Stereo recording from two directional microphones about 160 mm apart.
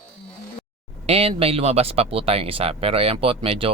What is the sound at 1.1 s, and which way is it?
Speech, 35° right (ahead or behind).